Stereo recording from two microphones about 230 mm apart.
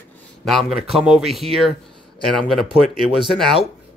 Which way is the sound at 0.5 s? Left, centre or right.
Centre.